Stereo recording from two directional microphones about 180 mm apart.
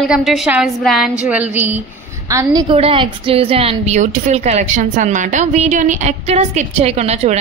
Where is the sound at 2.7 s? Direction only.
30° right (ahead or behind).